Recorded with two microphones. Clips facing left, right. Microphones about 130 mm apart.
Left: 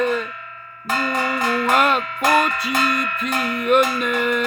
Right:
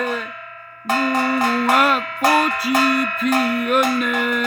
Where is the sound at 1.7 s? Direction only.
5° right (ahead or behind).